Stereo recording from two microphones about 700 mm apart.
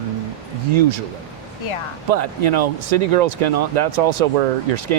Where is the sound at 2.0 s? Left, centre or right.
Right.